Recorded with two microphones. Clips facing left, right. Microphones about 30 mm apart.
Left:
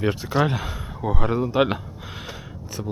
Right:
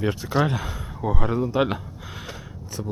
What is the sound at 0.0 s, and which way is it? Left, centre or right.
Speech, centre.